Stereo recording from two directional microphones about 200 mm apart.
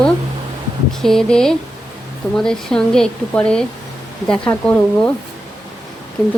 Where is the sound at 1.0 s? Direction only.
Centre (ahead or behind).